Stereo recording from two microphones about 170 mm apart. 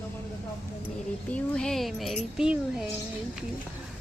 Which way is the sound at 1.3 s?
5° left (ahead or behind).